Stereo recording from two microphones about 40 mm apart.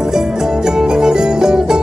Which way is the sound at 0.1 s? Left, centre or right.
Centre.